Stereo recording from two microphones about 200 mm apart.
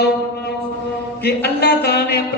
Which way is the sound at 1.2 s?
55° left (ahead or behind).